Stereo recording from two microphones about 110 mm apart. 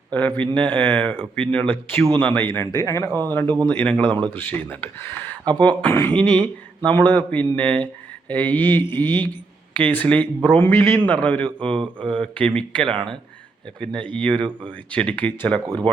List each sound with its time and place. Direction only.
0.1 s a man's voice: 15° left (ahead or behind)
3.4 s speech: 40° right (ahead or behind)
3.7 s a man's voice: 15° left (ahead or behind)
11.7 s mantra: 50° right (ahead or behind)
12.2 s a man's voice: 10° left (ahead or behind)